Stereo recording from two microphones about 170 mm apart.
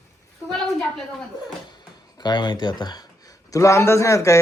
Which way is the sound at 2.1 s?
25° left (ahead or behind).